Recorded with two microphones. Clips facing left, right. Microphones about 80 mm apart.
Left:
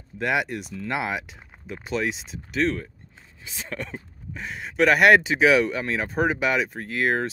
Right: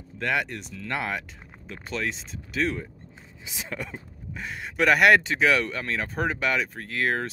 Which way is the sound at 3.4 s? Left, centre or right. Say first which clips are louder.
Left 1 dB; centre.